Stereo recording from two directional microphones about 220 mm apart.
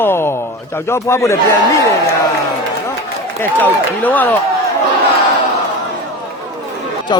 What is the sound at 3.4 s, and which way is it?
A man's voice, 5° left (ahead or behind).